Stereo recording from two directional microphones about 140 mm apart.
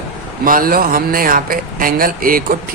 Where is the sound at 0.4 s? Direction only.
85° right.